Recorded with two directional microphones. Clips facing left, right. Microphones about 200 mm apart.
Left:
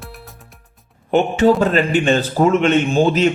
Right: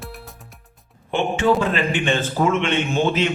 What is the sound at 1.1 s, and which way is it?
A man's voice, 40° left (ahead or behind).